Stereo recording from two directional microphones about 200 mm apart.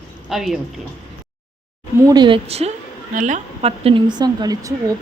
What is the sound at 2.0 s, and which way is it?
A woman's voice, 20° right (ahead or behind).